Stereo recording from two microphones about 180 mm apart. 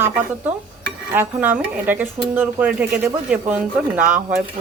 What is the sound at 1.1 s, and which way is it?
Speech, 10° right (ahead or behind).